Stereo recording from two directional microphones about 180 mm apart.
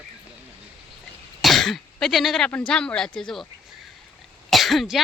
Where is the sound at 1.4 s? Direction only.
Centre (ahead or behind).